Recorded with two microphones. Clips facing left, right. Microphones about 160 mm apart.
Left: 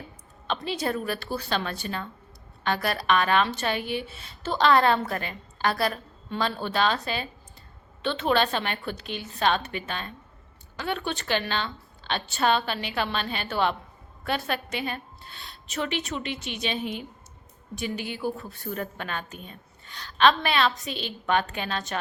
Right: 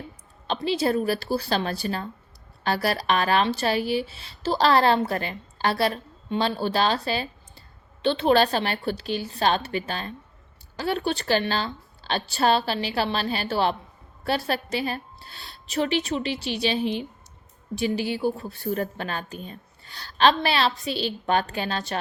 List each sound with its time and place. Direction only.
0.4 s a woman's voice: 30° right (ahead or behind)